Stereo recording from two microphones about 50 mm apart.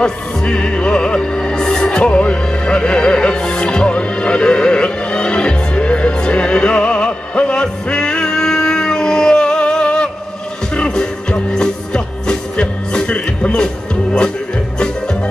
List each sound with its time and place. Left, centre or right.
0.0 s music: centre